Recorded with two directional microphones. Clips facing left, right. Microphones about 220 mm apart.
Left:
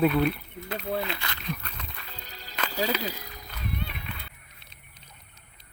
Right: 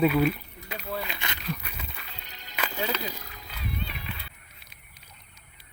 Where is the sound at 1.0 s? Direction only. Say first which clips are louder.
Left 1 dB; 15° right (ahead or behind).